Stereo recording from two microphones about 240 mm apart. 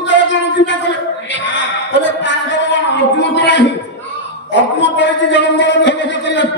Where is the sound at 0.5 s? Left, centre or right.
Left.